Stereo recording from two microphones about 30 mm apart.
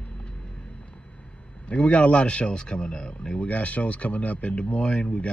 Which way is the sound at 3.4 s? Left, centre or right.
Left.